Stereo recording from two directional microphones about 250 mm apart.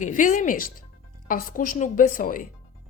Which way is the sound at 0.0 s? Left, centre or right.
Left.